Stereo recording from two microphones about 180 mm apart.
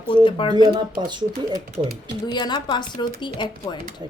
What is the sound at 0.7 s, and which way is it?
Speech, 25° right (ahead or behind).